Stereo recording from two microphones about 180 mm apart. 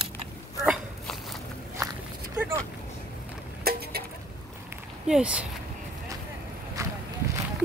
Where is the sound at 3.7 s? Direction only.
60° right (ahead or behind).